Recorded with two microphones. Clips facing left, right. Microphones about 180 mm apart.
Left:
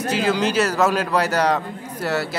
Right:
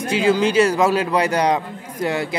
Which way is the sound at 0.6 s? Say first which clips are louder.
Right 3 dB; 10° right (ahead or behind).